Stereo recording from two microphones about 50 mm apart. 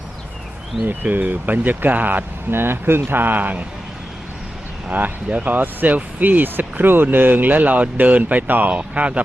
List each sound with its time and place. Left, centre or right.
0.9 s speech: right
4.9 s speech: right
8.7 s speech: right